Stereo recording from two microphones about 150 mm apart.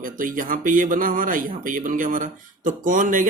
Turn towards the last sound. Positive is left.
turn(degrees=-60)  # may be behind; listen again after turning